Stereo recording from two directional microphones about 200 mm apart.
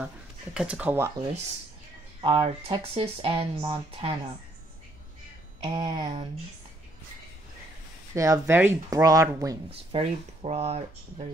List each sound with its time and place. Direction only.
0.6 s speech: 5° right (ahead or behind)
2.2 s speech: 25° right (ahead or behind)
5.6 s speech: 20° right (ahead or behind)
8.1 s speech: 15° right (ahead or behind)
9.9 s speech: 30° right (ahead or behind)